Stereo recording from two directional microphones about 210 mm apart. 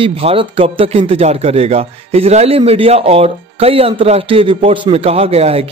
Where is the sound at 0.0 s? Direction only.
25° right (ahead or behind).